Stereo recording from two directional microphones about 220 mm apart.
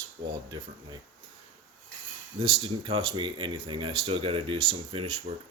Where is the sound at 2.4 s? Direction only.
25° right (ahead or behind).